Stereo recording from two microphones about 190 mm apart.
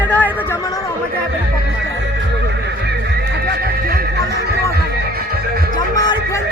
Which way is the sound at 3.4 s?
55° right (ahead or behind).